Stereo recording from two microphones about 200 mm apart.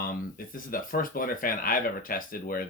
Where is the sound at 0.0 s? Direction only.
45° left (ahead or behind).